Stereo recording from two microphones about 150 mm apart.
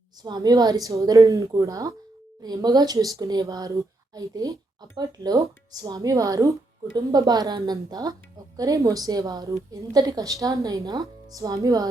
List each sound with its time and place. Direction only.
0.2 s speech: 25° right (ahead or behind)